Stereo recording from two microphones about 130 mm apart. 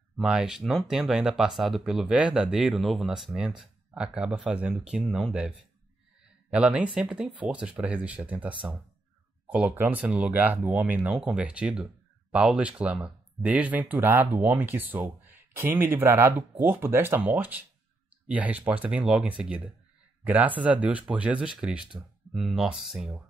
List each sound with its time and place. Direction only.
0.2 s speech: 5° right (ahead or behind)
6.5 s speech: 10° right (ahead or behind)